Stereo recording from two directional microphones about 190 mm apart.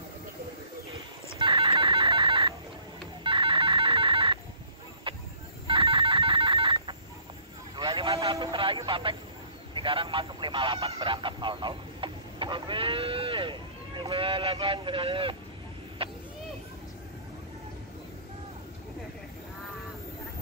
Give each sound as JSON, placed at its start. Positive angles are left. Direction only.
{"t": 0.9, "sound": "a sound", "side_deg": -30}
{"t": 3.3, "sound": "music", "side_deg": -25}
{"t": 5.1, "sound": "fowl", "side_deg": -25}
{"t": 5.7, "sound": "telephone", "side_deg": -30}
{"t": 7.7, "sound": "vehicle", "side_deg": -25}
{"t": 9.8, "sound": "speech", "side_deg": -25}
{"t": 16.0, "sound": "vehicle", "side_deg": -30}